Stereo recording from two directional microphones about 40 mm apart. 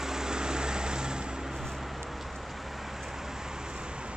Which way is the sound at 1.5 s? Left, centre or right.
Centre.